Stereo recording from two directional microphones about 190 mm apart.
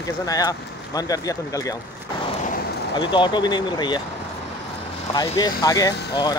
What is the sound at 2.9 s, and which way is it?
Speech, 25° left (ahead or behind).